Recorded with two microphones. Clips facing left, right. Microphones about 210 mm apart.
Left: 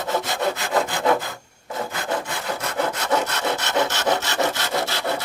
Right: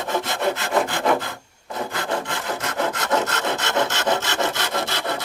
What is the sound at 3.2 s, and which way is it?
Wood, 10° left (ahead or behind).